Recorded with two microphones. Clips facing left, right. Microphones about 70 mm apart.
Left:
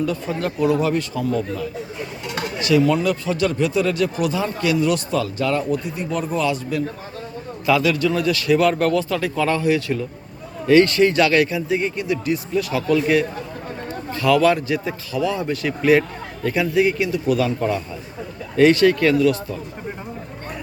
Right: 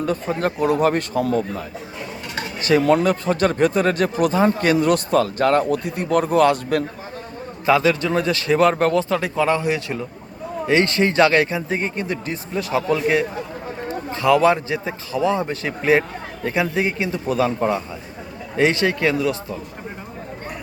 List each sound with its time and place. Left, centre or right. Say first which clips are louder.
0.0 s a man's voice: right 1 dB; right
7.6 s a man's voice: right 1 dB; right